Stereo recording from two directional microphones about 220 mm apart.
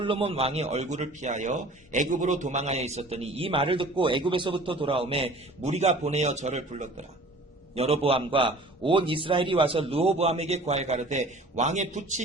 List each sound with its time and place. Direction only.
0.0 s a man's voice: 25° right (ahead or behind)